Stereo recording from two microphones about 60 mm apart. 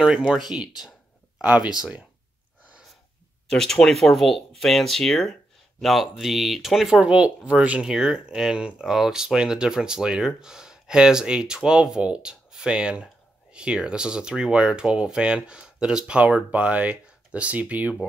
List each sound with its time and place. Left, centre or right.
0.0 s speech: centre
3.4 s speech: centre
7.0 s speech: centre
7.8 s speech: centre; by 17.9 s right